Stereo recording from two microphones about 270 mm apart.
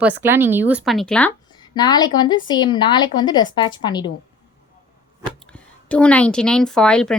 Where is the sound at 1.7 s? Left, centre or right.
Centre.